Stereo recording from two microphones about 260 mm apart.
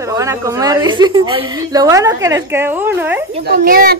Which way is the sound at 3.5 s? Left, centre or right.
Right.